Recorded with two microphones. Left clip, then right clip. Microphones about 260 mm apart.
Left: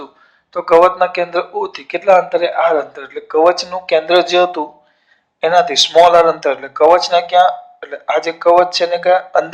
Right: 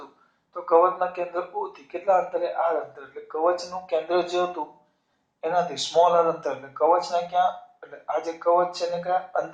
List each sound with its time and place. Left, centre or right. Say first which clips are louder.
0.5 s speech: left 10 dB; left